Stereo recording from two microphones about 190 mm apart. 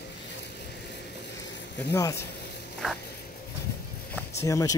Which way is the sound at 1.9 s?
15° left (ahead or behind).